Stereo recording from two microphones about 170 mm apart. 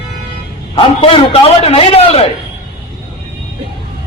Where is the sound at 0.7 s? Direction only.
30° left (ahead or behind).